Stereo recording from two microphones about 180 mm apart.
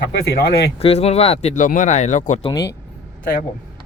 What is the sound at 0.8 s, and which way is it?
Speech, 35° left (ahead or behind).